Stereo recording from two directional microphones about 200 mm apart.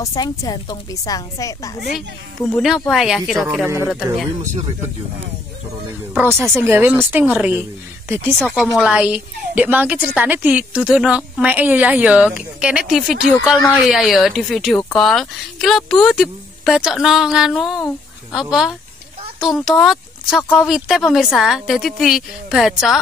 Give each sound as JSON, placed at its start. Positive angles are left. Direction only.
{"t": 0.0, "sound": "a woman's voice", "side_deg": 20}
{"t": 2.5, "sound": "a woman's voice", "side_deg": 0}
{"t": 6.2, "sound": "speech", "side_deg": -10}
{"t": 8.4, "sound": "a woman's voice", "side_deg": 5}